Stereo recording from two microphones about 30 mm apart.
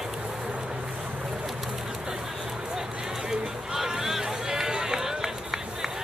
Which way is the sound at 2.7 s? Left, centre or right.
Centre.